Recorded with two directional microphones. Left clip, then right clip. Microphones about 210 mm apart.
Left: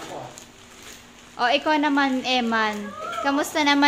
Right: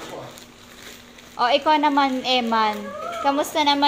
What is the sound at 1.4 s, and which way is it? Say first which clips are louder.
A woman's voice: right 3 dB; 15° left (ahead or behind).